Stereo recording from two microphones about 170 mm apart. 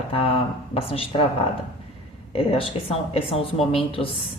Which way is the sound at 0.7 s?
35° left (ahead or behind).